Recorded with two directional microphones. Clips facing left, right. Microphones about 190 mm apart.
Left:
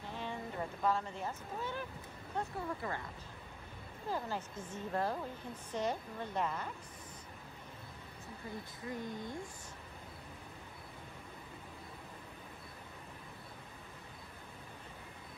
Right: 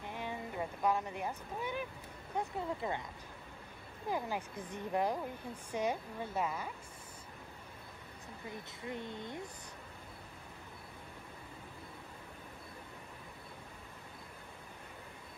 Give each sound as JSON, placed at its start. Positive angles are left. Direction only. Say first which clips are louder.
{"t": 0.0, "sound": "speech", "louder": "right 1 dB", "side_deg": -15}
{"t": 4.1, "sound": "speech", "louder": "right 2 dB", "side_deg": -15}
{"t": 8.8, "sound": "speech", "louder": "even", "side_deg": -25}